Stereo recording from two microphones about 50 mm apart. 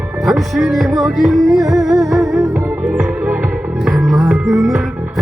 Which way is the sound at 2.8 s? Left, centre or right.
Right.